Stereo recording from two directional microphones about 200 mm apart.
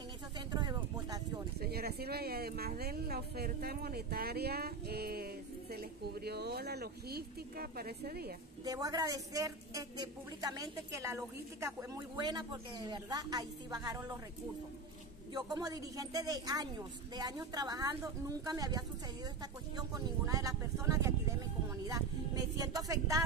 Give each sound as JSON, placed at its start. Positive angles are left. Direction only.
{"t": 0.5, "sound": "a sound", "side_deg": -20}
{"t": 1.6, "sound": "speech", "side_deg": -50}
{"t": 8.6, "sound": "a woman's voice", "side_deg": -20}
{"t": 15.3, "sound": "a woman's voice", "side_deg": -20}